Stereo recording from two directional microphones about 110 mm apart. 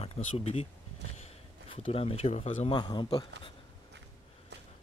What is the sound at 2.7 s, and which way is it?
Speech, 40° left (ahead or behind).